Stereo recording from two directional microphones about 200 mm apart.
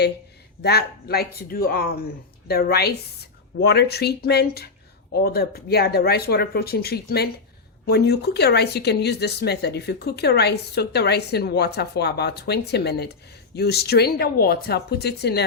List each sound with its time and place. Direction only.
0.6 s speech: 55° left (ahead or behind)